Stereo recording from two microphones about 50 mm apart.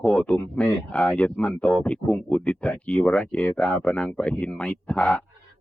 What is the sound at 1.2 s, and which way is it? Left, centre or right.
Speech, left.